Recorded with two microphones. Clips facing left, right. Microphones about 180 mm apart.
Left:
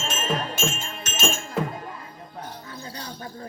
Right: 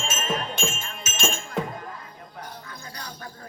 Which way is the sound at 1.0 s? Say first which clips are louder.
Left 3 dB; 5° right (ahead or behind).